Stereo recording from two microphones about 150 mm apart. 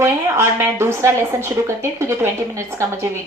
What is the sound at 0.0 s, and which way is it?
A woman's voice, 15° right (ahead or behind).